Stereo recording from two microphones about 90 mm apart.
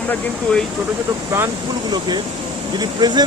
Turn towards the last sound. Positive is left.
turn(degrees=-50)  # may be behind; listen again after turning